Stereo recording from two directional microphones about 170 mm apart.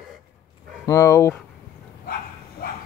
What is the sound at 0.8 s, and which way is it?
Speech, 15° left (ahead or behind).